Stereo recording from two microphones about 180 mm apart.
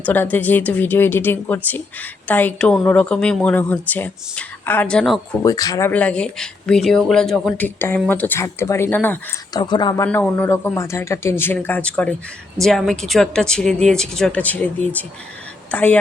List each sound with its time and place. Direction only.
0.0 s a woman's voice: 10° left (ahead or behind)
5.4 s speech: 20° left (ahead or behind)
5.9 s a woman's voice: 5° left (ahead or behind)
9.5 s a woman's voice: 25° left (ahead or behind)